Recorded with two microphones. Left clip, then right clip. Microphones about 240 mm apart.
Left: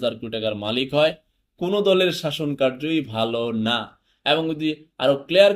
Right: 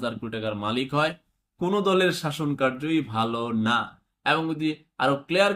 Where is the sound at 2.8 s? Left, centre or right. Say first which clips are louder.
Left 2 dB; right.